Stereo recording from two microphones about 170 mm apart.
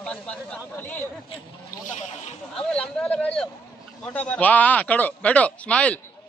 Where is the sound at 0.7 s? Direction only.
10° left (ahead or behind).